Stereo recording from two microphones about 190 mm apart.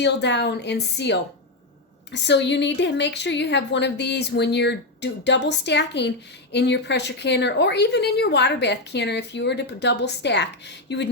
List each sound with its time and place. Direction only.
0.0 s a woman's voice: 65° left (ahead or behind)
2.2 s a woman's voice: 65° left (ahead or behind)